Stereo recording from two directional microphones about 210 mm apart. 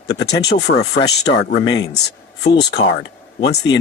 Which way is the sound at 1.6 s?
20° left (ahead or behind).